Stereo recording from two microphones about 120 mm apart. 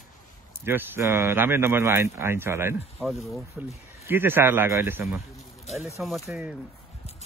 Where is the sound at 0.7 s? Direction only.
20° right (ahead or behind).